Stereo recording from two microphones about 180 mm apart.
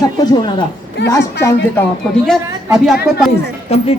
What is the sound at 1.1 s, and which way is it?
Speech, 15° left (ahead or behind).